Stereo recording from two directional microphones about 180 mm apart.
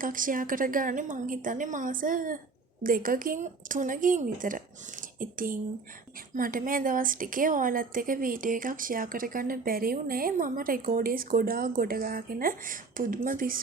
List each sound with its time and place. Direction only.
0.0 s a woman's voice: 50° right (ahead or behind)